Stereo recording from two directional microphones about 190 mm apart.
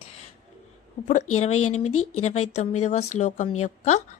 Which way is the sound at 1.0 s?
40° left (ahead or behind).